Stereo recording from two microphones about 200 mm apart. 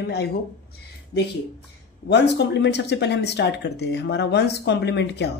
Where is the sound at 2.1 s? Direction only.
60° left (ahead or behind).